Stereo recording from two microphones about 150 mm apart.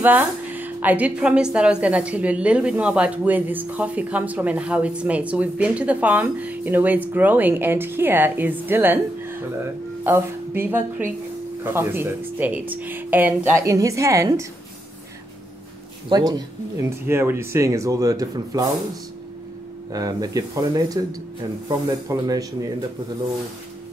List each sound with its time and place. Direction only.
0.0 s a woman's voice: 10° right (ahead or behind)
10.0 s a woman's voice: 15° right (ahead or behind)
16.1 s speech: 25° right (ahead or behind)
19.9 s speech: 25° right (ahead or behind)